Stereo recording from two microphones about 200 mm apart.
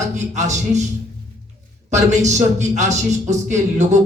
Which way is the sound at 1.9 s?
35° right (ahead or behind).